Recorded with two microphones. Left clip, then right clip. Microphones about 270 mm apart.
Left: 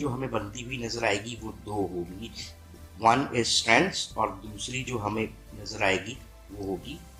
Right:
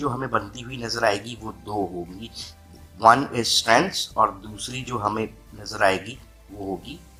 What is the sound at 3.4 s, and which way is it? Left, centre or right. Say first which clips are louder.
Speech: right 4 dB; right.